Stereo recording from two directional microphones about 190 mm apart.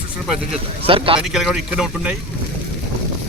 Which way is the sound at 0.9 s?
30° right (ahead or behind).